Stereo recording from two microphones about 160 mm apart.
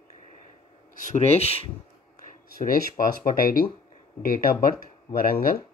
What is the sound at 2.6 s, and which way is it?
Speech, 60° left (ahead or behind).